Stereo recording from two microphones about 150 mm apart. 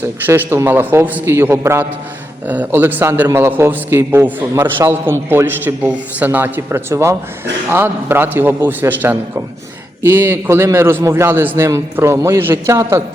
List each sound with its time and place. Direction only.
0.3 s a man's voice: 15° right (ahead or behind)